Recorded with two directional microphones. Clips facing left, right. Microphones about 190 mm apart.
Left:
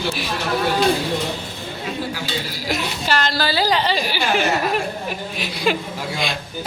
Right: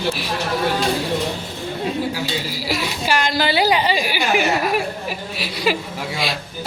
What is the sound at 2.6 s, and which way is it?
A woman's voice, 5° right (ahead or behind).